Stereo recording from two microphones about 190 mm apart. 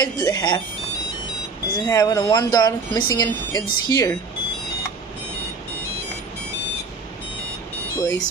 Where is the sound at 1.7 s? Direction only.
20° left (ahead or behind).